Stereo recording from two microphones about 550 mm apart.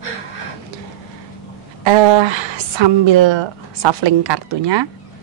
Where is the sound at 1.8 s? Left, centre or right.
Right.